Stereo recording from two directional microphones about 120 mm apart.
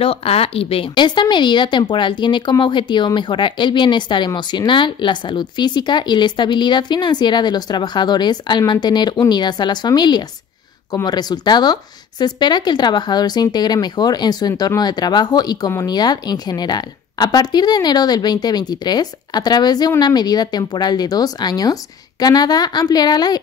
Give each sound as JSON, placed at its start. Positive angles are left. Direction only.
{"t": 0.0, "sound": "speech", "side_deg": 55}